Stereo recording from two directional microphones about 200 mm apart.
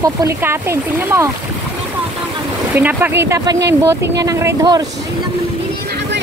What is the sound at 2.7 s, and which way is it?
Speech, 10° right (ahead or behind).